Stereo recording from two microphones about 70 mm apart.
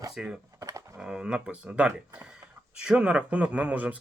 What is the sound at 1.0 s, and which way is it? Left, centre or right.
Speech, centre.